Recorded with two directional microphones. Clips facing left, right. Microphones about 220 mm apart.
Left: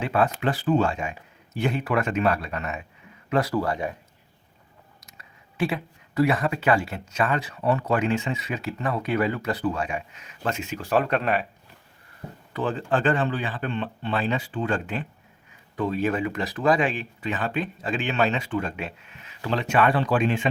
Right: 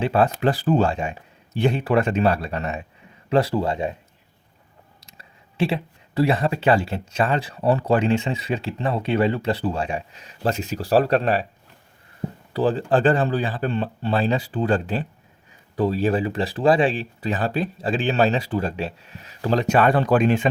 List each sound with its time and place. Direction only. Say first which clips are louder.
0.0 s speech: right 4 dB; 30° right (ahead or behind)
5.0 s speech: right 1 dB; 30° right (ahead or behind)
12.5 s speech: right 5 dB; 35° right (ahead or behind)